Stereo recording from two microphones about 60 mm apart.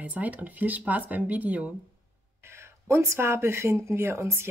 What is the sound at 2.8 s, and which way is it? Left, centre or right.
Speech, right.